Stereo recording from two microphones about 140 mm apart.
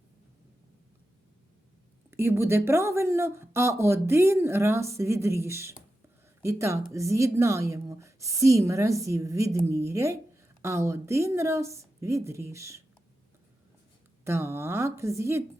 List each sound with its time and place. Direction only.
2.0 s a woman's voice: 15° right (ahead or behind)
14.3 s a woman's voice: 20° right (ahead or behind)